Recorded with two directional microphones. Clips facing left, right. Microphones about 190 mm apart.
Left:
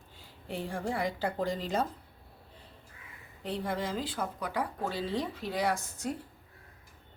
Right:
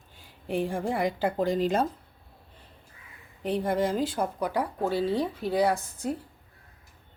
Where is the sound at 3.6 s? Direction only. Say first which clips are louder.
Right 8 dB; 50° right (ahead or behind).